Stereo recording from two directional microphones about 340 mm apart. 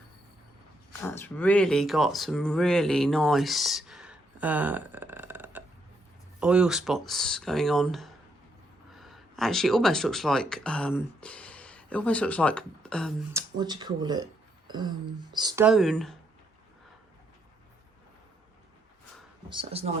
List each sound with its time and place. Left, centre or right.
1.0 s speech: centre
13.3 s speech: centre
19.5 s speech: centre